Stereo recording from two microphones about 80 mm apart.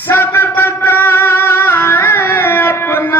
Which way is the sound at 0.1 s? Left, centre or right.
Left.